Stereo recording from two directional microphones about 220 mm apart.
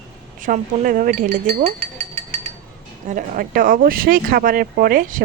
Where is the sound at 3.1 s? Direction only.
40° right (ahead or behind).